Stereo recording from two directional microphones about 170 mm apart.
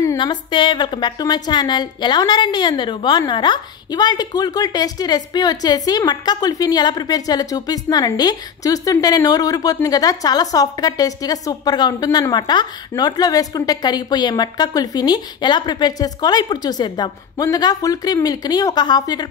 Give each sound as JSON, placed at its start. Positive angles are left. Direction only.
{"t": 0.0, "sound": "a woman's voice", "side_deg": 20}